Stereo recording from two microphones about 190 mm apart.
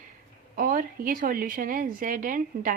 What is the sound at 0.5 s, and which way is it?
A woman's voice, 45° right (ahead or behind).